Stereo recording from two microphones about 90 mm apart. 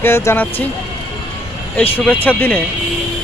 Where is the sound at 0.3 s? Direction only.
20° left (ahead or behind).